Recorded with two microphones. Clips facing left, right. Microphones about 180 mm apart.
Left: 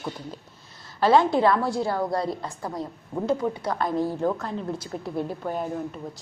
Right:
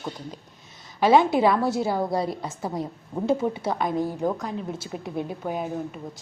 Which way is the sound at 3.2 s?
25° right (ahead or behind).